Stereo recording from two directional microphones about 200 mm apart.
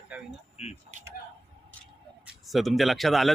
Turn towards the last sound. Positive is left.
turn(degrees=0)  # may be behind; listen again after turning